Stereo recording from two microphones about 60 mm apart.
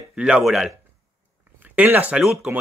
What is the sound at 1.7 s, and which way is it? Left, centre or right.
Speech, right.